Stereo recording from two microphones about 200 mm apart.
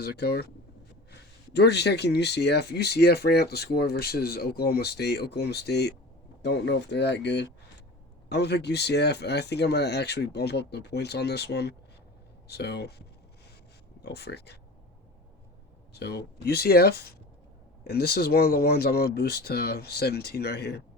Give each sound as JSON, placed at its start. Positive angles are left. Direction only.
{"t": 0.0, "sound": "speech", "side_deg": 50}
{"t": 16.0, "sound": "speech", "side_deg": 55}